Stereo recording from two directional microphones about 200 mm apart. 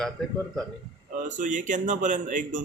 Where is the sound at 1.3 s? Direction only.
40° right (ahead or behind).